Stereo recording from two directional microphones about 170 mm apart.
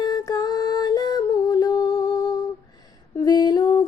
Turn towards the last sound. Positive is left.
turn(degrees=25)  # may be behind; listen again after turning